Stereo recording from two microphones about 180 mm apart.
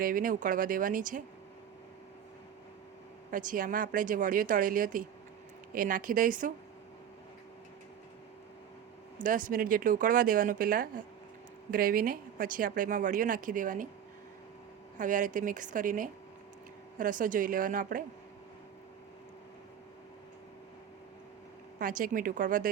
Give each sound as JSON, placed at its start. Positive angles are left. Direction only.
{"t": 0.0, "sound": "speech", "side_deg": -50}
{"t": 3.3, "sound": "speech", "side_deg": -45}
{"t": 9.1, "sound": "speech", "side_deg": -45}
{"t": 14.9, "sound": "speech", "side_deg": -45}
{"t": 21.8, "sound": "speech", "side_deg": -50}